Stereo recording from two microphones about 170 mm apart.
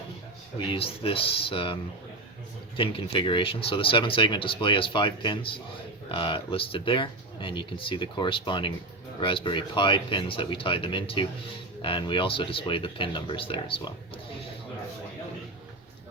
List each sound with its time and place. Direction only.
0.7 s speech: 35° left (ahead or behind)